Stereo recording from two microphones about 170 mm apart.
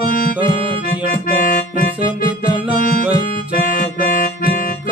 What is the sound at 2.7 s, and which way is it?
Music, 55° left (ahead or behind).